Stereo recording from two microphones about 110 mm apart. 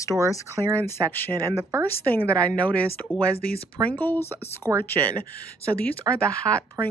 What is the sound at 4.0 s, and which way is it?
Speech, 15° left (ahead or behind).